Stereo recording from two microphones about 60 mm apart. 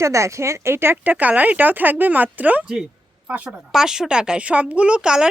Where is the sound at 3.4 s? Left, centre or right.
Centre.